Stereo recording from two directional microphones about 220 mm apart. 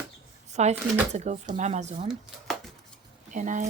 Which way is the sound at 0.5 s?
30° right (ahead or behind).